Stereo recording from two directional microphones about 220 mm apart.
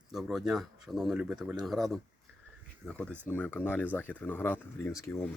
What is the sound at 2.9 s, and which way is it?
Speech, 5° left (ahead or behind).